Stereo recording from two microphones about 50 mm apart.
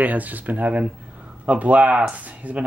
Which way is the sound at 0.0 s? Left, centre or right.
Right.